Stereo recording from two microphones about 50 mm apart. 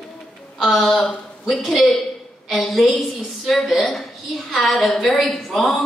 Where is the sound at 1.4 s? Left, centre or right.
Centre.